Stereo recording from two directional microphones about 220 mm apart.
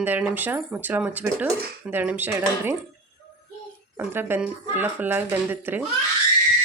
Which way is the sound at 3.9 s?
10° right (ahead or behind).